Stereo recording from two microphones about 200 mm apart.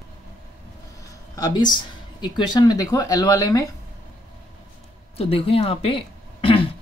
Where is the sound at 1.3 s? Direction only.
20° left (ahead or behind).